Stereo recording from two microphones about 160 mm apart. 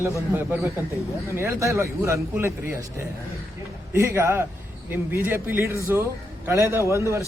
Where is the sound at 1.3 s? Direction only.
15° right (ahead or behind).